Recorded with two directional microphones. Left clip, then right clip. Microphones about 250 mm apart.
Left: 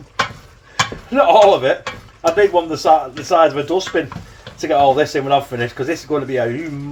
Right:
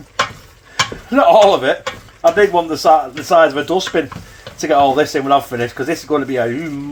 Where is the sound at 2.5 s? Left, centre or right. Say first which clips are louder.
Right 2 dB; right.